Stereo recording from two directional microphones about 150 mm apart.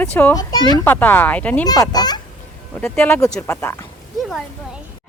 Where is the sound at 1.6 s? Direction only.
25° left (ahead or behind).